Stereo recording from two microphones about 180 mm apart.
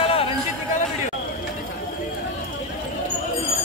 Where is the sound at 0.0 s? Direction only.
30° left (ahead or behind).